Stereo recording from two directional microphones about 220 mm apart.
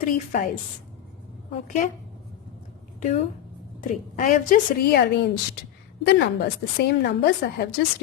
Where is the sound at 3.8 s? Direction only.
35° left (ahead or behind).